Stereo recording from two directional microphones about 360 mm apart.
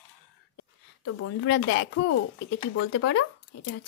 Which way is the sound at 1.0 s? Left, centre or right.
Left.